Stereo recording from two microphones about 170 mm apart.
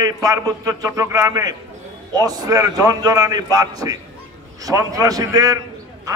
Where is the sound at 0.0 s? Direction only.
20° right (ahead or behind).